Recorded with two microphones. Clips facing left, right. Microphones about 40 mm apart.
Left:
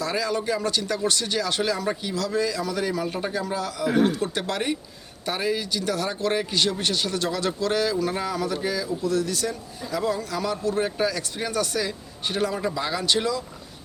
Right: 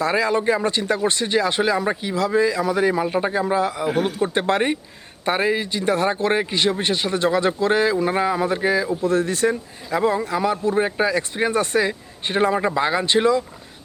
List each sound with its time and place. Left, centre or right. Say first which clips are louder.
0.0 s speech: right 6 dB; right